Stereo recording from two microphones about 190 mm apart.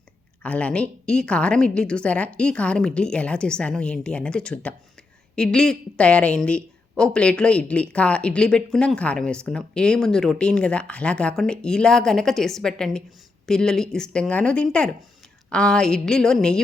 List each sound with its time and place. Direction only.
0.4 s speech: 5° left (ahead or behind)